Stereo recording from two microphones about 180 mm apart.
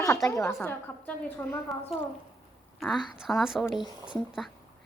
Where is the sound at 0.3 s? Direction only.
15° left (ahead or behind).